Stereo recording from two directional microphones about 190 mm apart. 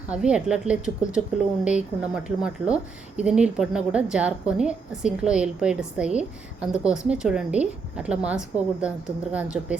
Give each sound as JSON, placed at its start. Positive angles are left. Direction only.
{"t": 0.1, "sound": "speech", "side_deg": -5}